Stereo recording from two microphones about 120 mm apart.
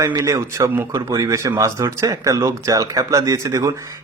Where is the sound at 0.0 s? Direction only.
25° right (ahead or behind).